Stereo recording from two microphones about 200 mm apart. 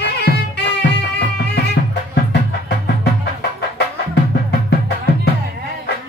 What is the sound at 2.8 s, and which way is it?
Music, 55° left (ahead or behind).